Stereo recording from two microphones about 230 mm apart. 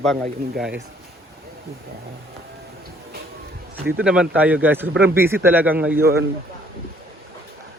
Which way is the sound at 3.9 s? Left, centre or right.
Centre.